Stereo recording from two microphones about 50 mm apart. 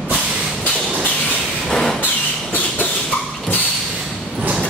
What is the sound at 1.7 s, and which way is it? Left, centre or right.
Vehicle, centre.